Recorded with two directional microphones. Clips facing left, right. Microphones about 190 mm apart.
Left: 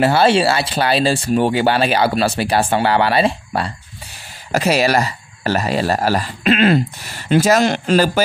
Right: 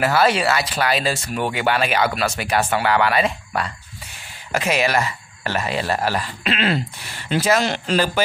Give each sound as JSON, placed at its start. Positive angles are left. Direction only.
{"t": 0.0, "sound": "speech", "side_deg": 30}